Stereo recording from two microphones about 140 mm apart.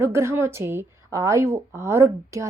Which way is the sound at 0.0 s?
20° right (ahead or behind).